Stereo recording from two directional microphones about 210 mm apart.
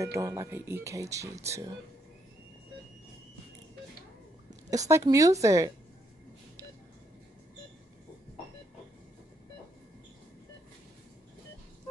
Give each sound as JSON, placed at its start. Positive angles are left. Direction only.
{"t": 0.0, "sound": "speech", "side_deg": -15}
{"t": 4.6, "sound": "speech", "side_deg": -15}